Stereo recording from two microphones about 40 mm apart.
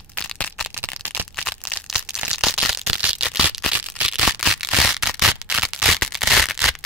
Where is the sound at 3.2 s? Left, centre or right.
Centre.